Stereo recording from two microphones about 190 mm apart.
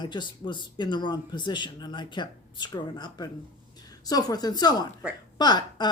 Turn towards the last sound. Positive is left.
turn(degrees=20)  # may be behind; listen again after turning